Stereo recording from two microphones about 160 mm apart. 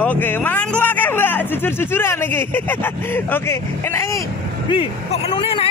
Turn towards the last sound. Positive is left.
turn(degrees=35)  # may be behind; listen again after turning